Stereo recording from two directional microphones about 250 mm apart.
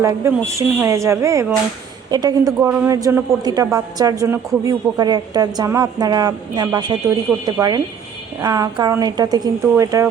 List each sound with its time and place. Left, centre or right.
0.0 s a man's voice: centre